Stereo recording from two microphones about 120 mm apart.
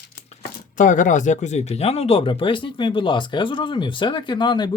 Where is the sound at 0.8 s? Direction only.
90° left.